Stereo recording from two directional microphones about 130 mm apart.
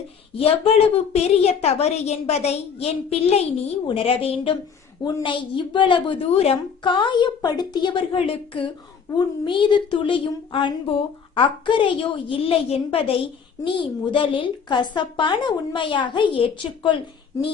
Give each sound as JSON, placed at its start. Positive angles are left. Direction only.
{"t": 0.3, "sound": "a woman's voice", "side_deg": 50}